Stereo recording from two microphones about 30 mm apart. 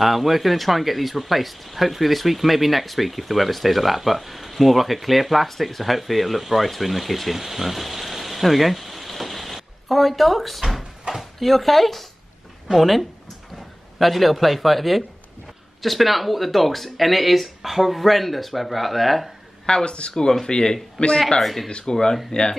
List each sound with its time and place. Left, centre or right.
0.0 s speech: centre
19.6 s speech: left
21.0 s speech: left
21.4 s speech: centre
21.8 s speech: left